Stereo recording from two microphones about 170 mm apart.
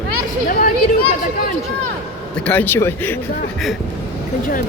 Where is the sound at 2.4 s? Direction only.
10° left (ahead or behind).